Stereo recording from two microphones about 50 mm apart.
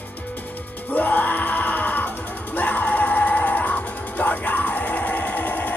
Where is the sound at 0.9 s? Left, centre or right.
Left.